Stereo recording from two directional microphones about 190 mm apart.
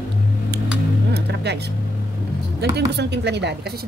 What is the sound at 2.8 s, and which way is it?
Speech, 60° right (ahead or behind).